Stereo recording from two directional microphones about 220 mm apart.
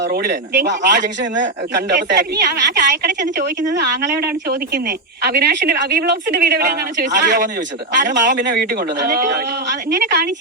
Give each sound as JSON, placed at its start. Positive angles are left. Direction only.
{"t": 0.0, "sound": "speech", "side_deg": -45}